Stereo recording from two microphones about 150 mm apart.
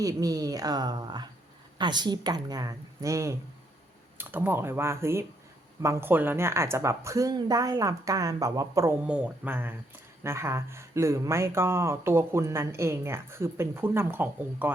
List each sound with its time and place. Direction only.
0.0 s a woman's voice: 25° right (ahead or behind)
9.0 s speech: 10° right (ahead or behind)